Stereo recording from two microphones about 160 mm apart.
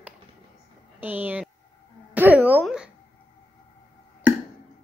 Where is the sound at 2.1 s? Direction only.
10° right (ahead or behind).